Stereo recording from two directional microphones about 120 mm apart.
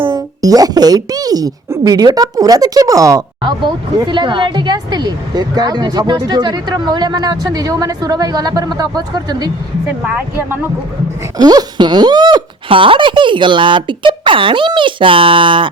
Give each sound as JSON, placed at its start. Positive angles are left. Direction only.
{"t": 0.0, "sound": "speech", "side_deg": -35}
{"t": 3.6, "sound": "speech", "side_deg": -40}
{"t": 10.3, "sound": "speech", "side_deg": -20}
{"t": 11.3, "sound": "speech", "side_deg": -35}